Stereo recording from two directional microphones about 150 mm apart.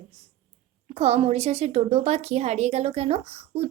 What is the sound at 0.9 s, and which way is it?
A woman's voice, 45° right (ahead or behind).